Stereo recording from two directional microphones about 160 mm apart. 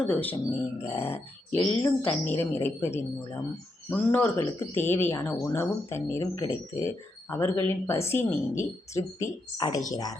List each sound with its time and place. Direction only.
0.0 s speech: 10° left (ahead or behind)